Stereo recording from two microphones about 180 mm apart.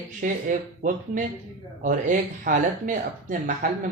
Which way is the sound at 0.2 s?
45° right (ahead or behind).